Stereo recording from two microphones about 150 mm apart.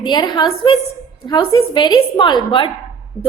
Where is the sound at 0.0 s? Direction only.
30° left (ahead or behind).